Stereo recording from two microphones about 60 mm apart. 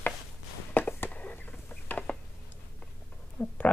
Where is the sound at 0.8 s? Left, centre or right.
Left.